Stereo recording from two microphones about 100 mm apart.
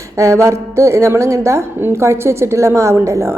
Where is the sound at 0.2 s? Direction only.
30° right (ahead or behind).